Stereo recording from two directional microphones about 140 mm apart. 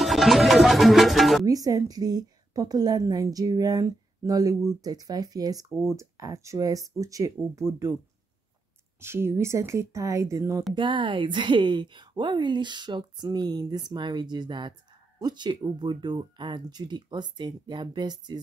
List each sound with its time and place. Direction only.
0.0 s music: centre (ahead or behind)
1.4 s a woman's voice: 25° right (ahead or behind)
5.7 s speech: centre (ahead or behind)
5.9 s a woman's voice: 25° right (ahead or behind)
9.0 s a woman's voice: 20° right (ahead or behind)
10.7 s a woman's voice: 35° right (ahead or behind)